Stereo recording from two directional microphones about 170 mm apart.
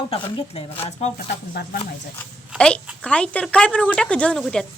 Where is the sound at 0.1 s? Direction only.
30° left (ahead or behind).